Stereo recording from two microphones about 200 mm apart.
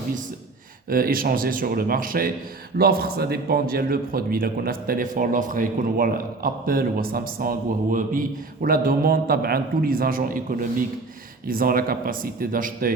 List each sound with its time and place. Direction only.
0.9 s a man's voice: 45° right (ahead or behind)